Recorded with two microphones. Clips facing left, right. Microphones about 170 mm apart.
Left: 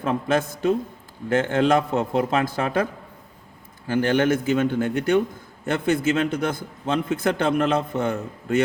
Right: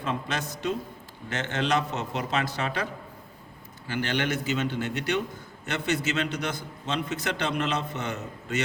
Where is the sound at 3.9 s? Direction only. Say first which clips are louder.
Left 9 dB; 45° left (ahead or behind).